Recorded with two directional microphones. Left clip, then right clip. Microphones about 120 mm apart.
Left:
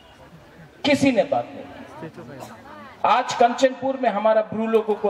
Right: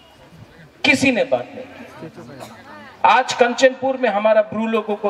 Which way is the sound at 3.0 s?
30° right (ahead or behind).